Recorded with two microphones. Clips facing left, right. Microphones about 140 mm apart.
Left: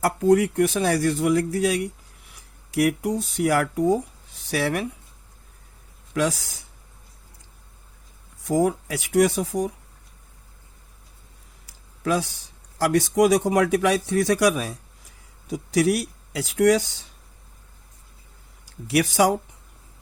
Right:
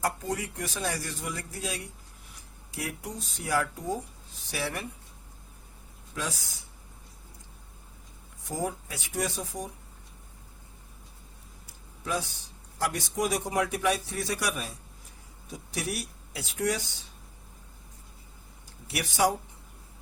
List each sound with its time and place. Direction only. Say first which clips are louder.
0.0 s a man's voice: left 13 dB; 70° left (ahead or behind); by 4.9 s 90° left
6.1 s speech: left 12 dB; 80° left
8.4 s speech: left 11 dB; 85° left
11.6 s a sound: left 12 dB; 90° left
12.8 s a man's voice: left 11 dB; 90° left
18.9 s a man's voice: left 7 dB; 90° left